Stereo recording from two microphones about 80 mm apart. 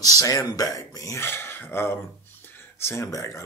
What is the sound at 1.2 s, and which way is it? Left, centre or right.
Speech, left.